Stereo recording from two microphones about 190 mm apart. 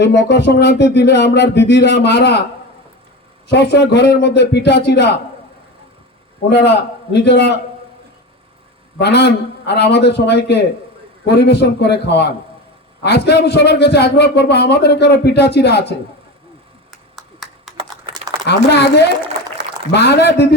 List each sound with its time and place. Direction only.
0.0 s a man's voice: 65° left (ahead or behind)
3.5 s a man's voice: 65° left (ahead or behind)
7.1 s a man's voice: 65° left (ahead or behind)
9.0 s a man's voice: 60° left (ahead or behind)
16.9 s a sound: centre (ahead or behind)
17.7 s computer keyboard: 30° right (ahead or behind)
18.4 s a man's voice: 60° left (ahead or behind)